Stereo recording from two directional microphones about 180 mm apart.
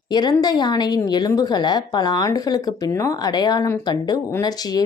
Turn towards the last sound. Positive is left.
turn(degrees=20)  # may be behind; listen again after turning